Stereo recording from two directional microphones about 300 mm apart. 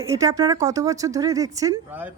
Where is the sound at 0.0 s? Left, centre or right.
Centre.